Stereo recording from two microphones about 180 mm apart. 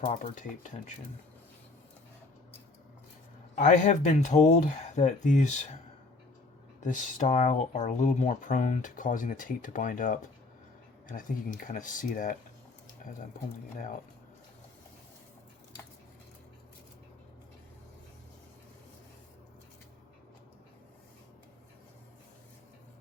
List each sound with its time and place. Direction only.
0.1 s speech: 45° left (ahead or behind)
3.5 s speech: 45° left (ahead or behind)
6.8 s speech: 45° left (ahead or behind)